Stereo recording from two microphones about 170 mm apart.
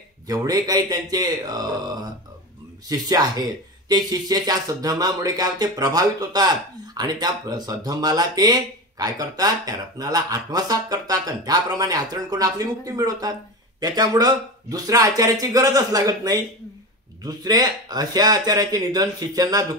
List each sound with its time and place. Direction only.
0.3 s speech: 20° right (ahead or behind)